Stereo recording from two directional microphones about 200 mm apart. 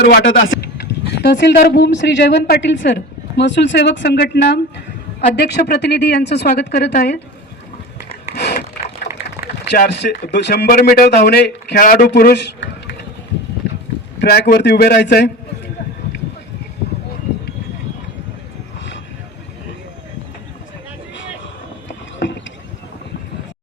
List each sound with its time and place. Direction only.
0.0 s speech: 55° left (ahead or behind)
0.3 s speech: 75° left (ahead or behind); by 7.2 s 50° left (ahead or behind)
9.6 s speech: 55° left (ahead or behind)
14.2 s speech: 55° left (ahead or behind)
22.2 s a sound: 65° left (ahead or behind)